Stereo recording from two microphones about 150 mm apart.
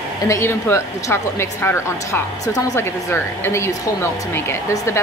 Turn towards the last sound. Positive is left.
turn(degrees=20)  # may be behind; listen again after turning